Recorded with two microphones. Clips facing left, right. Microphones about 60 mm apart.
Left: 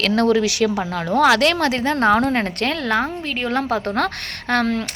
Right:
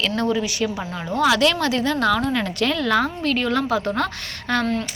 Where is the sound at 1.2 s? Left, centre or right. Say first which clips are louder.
Left 2 dB; left.